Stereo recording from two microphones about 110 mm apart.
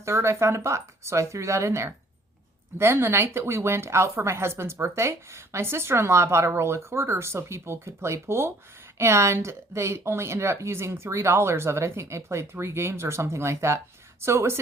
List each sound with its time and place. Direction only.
0.0 s speech: 25° right (ahead or behind)